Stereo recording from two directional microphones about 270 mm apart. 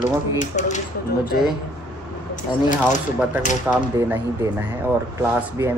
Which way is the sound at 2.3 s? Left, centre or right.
Left.